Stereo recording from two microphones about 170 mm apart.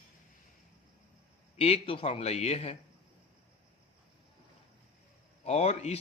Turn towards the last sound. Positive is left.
turn(degrees=40)  # may be behind; listen again after turning